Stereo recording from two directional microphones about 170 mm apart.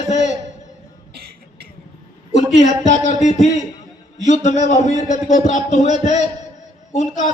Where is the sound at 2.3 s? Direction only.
45° left (ahead or behind).